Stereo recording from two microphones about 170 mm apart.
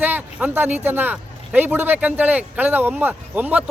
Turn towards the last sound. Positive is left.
turn(degrees=-10)  # may be behind; listen again after turning